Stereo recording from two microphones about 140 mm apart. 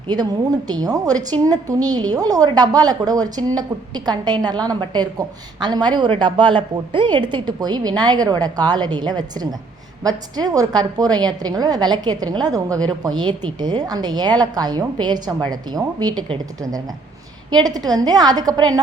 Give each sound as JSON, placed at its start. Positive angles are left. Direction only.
{"t": 0.7, "sound": "a woman's voice", "side_deg": -25}